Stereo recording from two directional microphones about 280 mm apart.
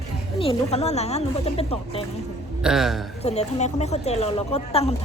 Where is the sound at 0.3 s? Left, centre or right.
Left.